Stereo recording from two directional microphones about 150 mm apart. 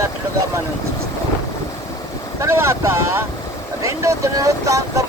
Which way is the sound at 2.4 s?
20° right (ahead or behind).